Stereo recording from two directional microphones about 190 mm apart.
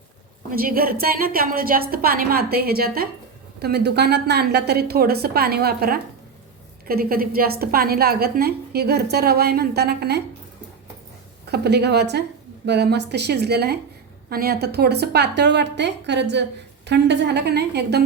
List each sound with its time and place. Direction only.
0.5 s a woman's voice: 50° right (ahead or behind)
11.4 s a woman's voice: 60° right (ahead or behind)